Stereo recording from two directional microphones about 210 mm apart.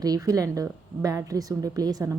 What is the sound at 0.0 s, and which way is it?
A woman's voice, 15° right (ahead or behind).